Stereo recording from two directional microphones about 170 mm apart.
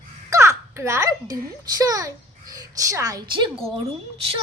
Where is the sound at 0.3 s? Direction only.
15° right (ahead or behind).